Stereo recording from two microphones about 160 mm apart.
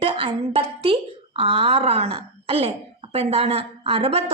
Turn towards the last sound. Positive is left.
turn(degrees=-40)  # may be behind; listen again after turning